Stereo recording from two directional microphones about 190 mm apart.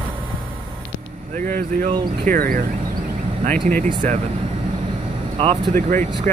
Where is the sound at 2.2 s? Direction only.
50° right (ahead or behind).